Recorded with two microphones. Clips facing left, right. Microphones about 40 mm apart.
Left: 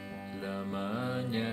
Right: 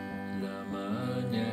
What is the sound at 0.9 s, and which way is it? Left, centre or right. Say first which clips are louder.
Music: right 3 dB; centre.